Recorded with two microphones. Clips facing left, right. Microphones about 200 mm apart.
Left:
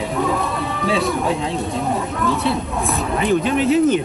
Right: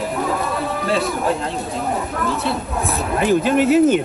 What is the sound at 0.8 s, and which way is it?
Speech, centre (ahead or behind).